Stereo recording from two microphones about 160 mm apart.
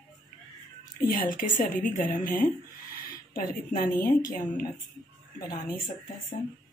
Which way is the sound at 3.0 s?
65° left (ahead or behind).